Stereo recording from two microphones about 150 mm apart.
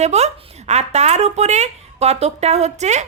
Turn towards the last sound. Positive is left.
turn(degrees=-50)  # may be behind; listen again after turning